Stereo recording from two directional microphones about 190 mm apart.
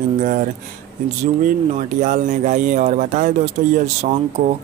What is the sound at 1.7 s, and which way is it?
Speech, 40° right (ahead or behind).